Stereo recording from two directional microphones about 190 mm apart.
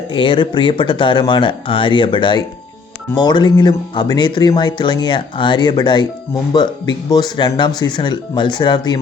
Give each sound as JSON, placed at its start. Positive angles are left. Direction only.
{"t": 0.1, "sound": "speech", "side_deg": 25}